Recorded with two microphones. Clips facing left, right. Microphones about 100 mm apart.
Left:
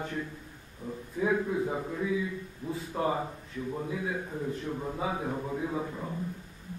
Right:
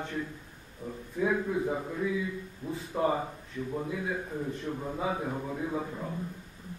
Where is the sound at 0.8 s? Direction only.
15° right (ahead or behind).